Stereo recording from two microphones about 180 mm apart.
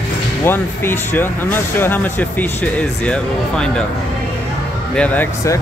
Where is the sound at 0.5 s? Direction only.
10° left (ahead or behind).